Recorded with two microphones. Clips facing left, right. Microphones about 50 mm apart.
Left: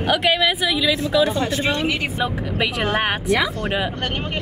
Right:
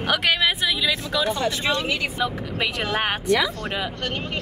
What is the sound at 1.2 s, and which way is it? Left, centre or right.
Speech, left.